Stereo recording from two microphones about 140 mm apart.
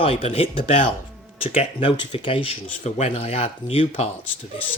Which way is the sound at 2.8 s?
55° left (ahead or behind).